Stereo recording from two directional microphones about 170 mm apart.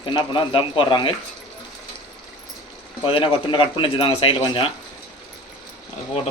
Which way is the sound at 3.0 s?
30° left (ahead or behind).